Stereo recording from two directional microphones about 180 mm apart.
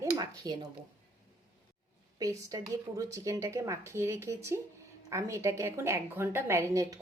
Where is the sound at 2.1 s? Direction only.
20° right (ahead or behind).